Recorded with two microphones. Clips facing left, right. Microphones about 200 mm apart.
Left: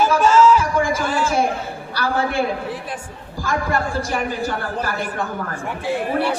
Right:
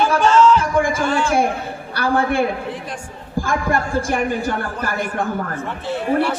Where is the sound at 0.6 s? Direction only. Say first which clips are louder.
Right 2 dB; 55° right (ahead or behind).